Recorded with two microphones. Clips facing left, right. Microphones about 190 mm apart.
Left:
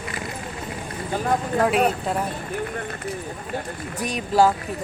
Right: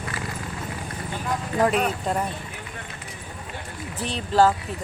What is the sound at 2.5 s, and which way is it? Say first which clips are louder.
Run: left 10 dB; 50° left (ahead or behind).